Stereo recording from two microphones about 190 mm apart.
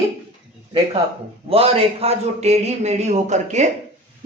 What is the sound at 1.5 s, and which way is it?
A man's voice, 30° right (ahead or behind).